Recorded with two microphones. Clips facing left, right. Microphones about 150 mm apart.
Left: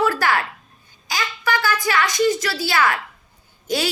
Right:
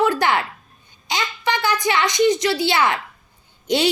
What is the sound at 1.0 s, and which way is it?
A child's voice, 20° right (ahead or behind).